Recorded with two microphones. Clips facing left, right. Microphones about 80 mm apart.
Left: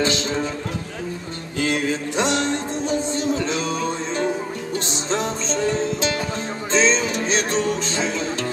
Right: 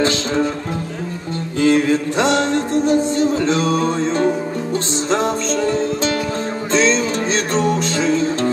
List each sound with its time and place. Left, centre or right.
0.0 s music: right
1.6 s music: right
6.8 s music: right